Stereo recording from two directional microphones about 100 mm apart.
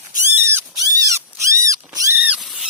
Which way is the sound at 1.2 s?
30° right (ahead or behind).